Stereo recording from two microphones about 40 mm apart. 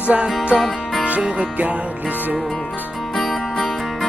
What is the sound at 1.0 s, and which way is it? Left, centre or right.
Speech, right.